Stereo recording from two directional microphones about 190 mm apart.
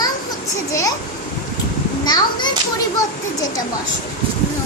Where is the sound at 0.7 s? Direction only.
15° left (ahead or behind).